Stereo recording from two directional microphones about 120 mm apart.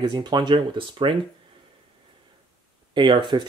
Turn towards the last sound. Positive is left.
turn(degrees=-40)  # may be behind; listen again after turning